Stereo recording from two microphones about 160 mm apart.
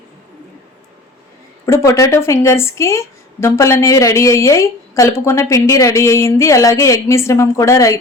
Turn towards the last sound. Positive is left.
turn(degrees=20)  # may be behind; listen again after turning